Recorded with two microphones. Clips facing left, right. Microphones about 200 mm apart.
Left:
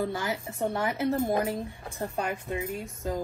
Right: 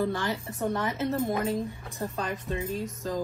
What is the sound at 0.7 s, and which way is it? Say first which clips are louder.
A woman's voice: left 3 dB; 10° left (ahead or behind).